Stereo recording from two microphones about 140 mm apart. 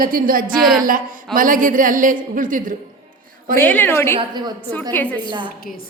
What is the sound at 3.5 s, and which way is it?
A woman's voice, 15° left (ahead or behind).